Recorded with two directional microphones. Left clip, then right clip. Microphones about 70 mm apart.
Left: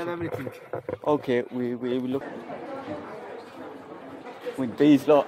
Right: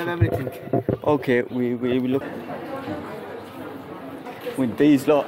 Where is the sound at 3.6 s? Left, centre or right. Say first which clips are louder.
Right 5 dB; centre.